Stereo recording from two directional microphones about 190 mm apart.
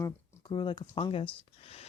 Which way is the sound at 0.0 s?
25° left (ahead or behind).